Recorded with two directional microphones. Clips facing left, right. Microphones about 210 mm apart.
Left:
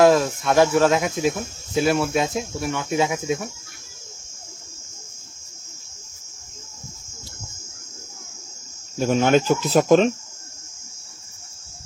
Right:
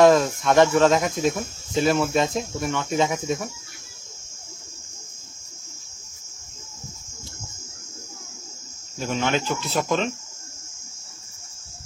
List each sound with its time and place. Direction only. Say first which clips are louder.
0.0 s cricket: even; centre (ahead or behind)
8.9 s speech: left 7 dB; 45° left (ahead or behind)